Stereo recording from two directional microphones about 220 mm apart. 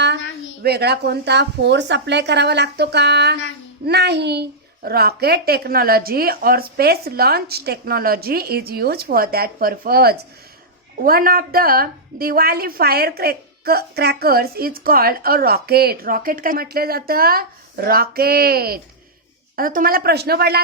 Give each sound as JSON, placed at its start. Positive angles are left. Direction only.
{"t": 0.6, "sound": "a woman's voice", "side_deg": -45}